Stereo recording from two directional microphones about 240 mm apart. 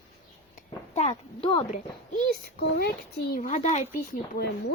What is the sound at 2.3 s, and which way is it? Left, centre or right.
A child's voice, left.